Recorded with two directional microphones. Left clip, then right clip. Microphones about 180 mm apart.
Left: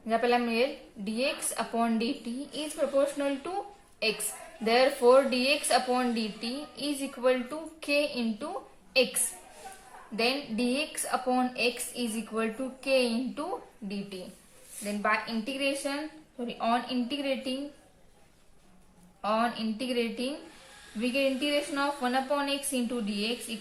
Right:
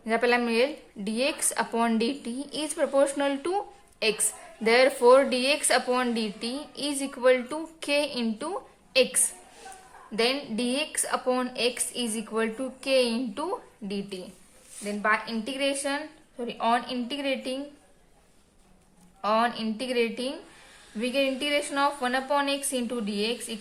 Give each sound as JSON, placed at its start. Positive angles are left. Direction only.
{"t": 0.0, "sound": "speech", "side_deg": -55}
{"t": 4.6, "sound": "speech", "side_deg": -55}
{"t": 10.2, "sound": "speech", "side_deg": -50}
{"t": 14.8, "sound": "speech", "side_deg": -35}
{"t": 19.2, "sound": "speech", "side_deg": -50}